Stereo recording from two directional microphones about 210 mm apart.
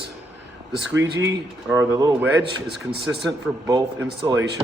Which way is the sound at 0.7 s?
60° right (ahead or behind).